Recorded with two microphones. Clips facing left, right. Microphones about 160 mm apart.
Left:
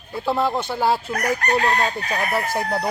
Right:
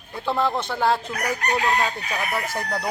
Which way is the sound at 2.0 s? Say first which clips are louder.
Left 4 dB; 40° left (ahead or behind).